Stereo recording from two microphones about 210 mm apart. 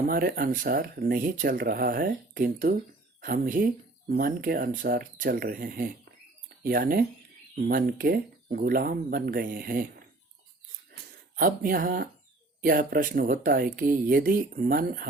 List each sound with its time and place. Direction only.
0.1 s speech: 45° right (ahead or behind)
11.3 s speech: 45° right (ahead or behind)